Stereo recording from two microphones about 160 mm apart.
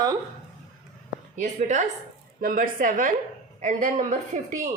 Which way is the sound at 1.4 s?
50° right (ahead or behind).